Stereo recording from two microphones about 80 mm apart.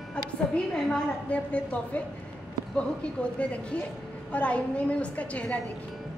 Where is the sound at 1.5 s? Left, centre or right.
Centre.